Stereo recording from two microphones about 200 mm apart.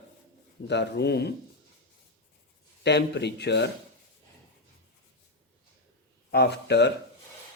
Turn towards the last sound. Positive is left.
turn(degrees=55)  # may be behind; listen again after turning